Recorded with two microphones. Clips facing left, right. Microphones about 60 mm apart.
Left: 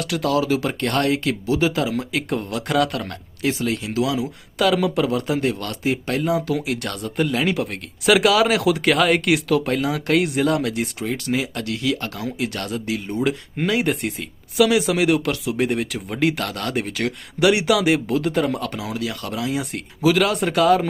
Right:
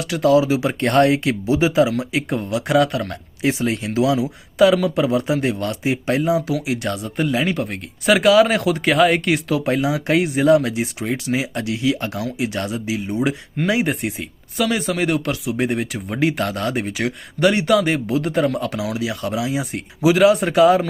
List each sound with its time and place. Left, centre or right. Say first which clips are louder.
0.0 s speech: right 5 dB; centre
0.8 s speech: right 5 dB; right
1.9 s speech: right 2 dB; centre
3.1 s speech: right 3 dB; right
4.5 s speech: right 4 dB; centre
11.0 s speech: right 1 dB; centre
17.5 s speech: left 2 dB; centre